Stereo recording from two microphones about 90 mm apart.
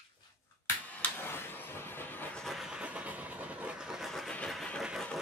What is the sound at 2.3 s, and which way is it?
Vehicle, centre (ahead or behind).